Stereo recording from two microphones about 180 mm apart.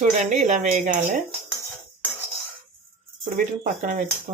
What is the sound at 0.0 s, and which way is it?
Speech, 45° right (ahead or behind).